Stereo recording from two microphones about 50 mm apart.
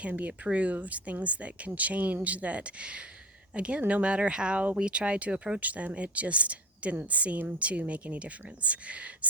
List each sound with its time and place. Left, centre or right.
0.0 s a woman's voice: right